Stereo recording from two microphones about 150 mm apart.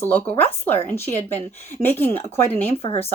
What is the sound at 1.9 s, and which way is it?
Speech, 15° left (ahead or behind).